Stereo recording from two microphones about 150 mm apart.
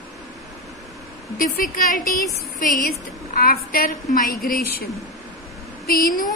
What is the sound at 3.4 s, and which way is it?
A woman's voice, 80° left.